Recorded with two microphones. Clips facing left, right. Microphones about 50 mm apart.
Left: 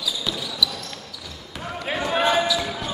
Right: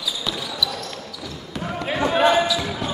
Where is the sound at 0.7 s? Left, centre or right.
Centre.